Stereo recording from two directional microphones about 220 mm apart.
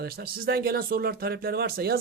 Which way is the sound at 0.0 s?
45° right (ahead or behind).